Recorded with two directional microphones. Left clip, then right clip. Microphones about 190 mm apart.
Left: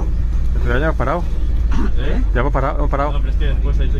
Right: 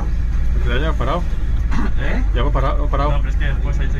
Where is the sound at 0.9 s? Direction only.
50° left (ahead or behind).